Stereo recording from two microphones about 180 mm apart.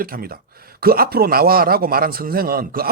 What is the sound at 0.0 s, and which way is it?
Speech, 55° right (ahead or behind).